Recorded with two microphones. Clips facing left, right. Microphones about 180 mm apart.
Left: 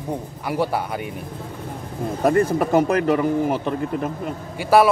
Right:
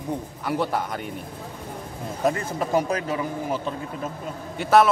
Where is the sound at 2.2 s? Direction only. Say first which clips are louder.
Left 7 dB; 55° left (ahead or behind).